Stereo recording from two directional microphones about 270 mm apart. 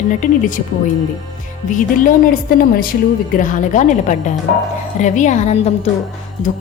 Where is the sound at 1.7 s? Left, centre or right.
Left.